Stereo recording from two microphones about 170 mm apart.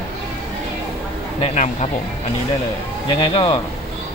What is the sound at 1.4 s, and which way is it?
Speech, 45° left (ahead or behind).